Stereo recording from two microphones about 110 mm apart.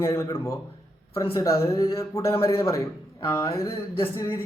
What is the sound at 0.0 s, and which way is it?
Speech, 25° left (ahead or behind).